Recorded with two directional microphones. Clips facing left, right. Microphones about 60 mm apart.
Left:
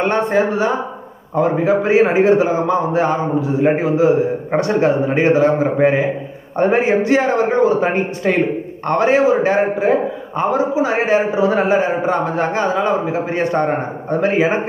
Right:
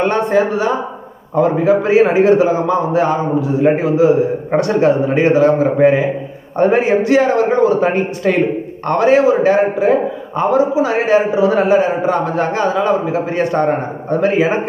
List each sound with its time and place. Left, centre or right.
0.0 s a man's voice: left